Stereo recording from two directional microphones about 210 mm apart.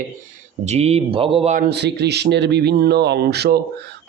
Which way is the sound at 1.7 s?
50° right (ahead or behind).